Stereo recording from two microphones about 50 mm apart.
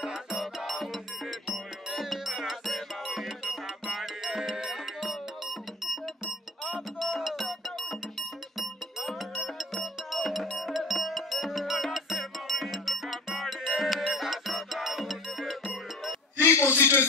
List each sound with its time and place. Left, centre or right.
0.0 s music: centre
16.4 s a man's voice: left